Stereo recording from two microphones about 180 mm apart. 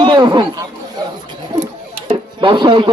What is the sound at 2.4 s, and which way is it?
Speech, 25° right (ahead or behind).